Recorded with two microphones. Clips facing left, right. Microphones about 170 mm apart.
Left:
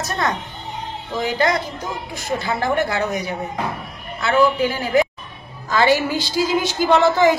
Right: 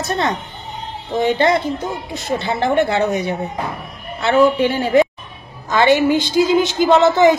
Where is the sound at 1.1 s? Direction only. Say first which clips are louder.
Right 5 dB; 30° right (ahead or behind).